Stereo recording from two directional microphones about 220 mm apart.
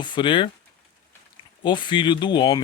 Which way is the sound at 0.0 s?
20° left (ahead or behind).